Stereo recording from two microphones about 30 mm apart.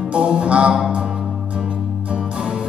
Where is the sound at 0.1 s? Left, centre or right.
Right.